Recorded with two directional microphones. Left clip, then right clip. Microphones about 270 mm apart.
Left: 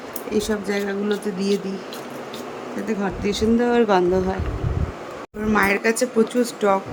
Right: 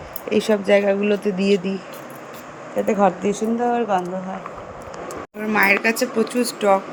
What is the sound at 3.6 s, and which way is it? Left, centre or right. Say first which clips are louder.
Speech: left 1 dB; centre.